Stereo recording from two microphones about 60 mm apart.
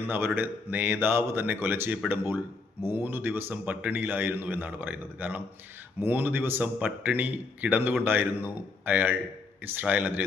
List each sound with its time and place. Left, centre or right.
0.3 s a man's voice: right
3.5 s a man's voice: right